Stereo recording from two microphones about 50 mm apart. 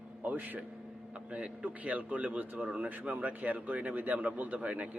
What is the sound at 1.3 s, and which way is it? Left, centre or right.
Speech, right.